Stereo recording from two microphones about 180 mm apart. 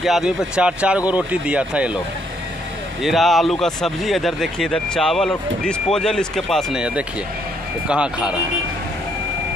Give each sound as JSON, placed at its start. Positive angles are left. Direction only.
{"t": 0.0, "sound": "speech", "side_deg": -5}
{"t": 3.0, "sound": "speech", "side_deg": 0}